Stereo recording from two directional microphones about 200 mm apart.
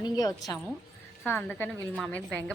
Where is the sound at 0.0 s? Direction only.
20° left (ahead or behind).